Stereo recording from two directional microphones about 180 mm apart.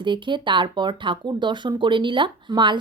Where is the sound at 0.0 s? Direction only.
25° right (ahead or behind).